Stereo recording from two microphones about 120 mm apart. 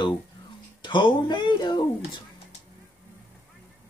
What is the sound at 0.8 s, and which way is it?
Speech, 40° left (ahead or behind).